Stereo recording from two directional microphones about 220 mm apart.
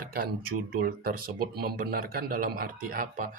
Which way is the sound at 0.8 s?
40° right (ahead or behind).